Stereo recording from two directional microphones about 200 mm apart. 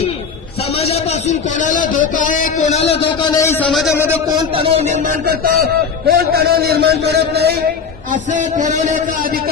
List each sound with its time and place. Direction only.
0.7 s a man's voice: 30° left (ahead or behind)
3.2 s a sound: 20° left (ahead or behind)
3.7 s speech: centre (ahead or behind)
4.4 s a man's voice: 25° right (ahead or behind); by 7.6 s 55° right (ahead or behind)
8.1 s a man's voice: 40° right (ahead or behind)